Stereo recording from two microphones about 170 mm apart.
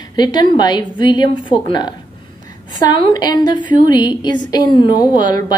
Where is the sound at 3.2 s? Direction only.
25° left (ahead or behind).